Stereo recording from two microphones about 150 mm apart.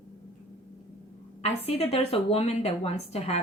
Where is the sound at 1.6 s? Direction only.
40° left (ahead or behind).